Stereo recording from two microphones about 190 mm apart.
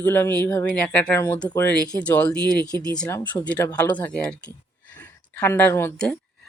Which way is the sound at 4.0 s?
5° left (ahead or behind).